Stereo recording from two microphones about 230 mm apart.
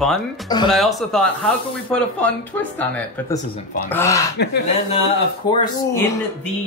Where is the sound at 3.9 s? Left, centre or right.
Centre.